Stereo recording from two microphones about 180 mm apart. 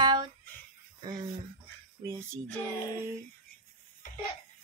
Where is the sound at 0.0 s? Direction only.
25° right (ahead or behind).